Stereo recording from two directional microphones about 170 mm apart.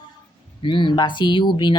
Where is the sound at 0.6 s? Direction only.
30° left (ahead or behind).